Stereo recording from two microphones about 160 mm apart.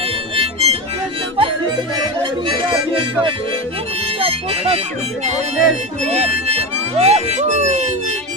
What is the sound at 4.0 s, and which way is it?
Harmonica, 40° right (ahead or behind).